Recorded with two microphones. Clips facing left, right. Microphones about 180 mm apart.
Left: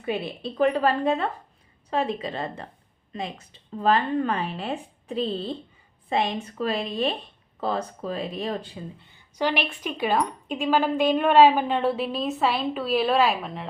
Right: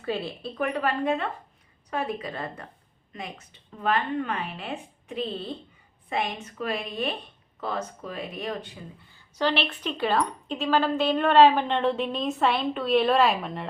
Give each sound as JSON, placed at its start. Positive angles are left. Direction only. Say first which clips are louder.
{"t": 0.0, "sound": "a woman's voice", "louder": "left 2 dB", "side_deg": 20}
{"t": 0.5, "sound": "a woman's voice", "louder": "left 6 dB", "side_deg": 30}
{"t": 9.4, "sound": "a woman's voice", "louder": "even", "side_deg": 10}